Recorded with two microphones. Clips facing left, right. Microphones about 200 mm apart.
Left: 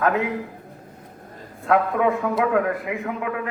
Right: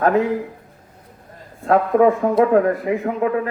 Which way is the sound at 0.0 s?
35° right (ahead or behind).